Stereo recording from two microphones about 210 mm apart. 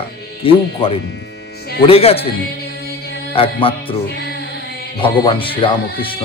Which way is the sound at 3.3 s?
25° left (ahead or behind).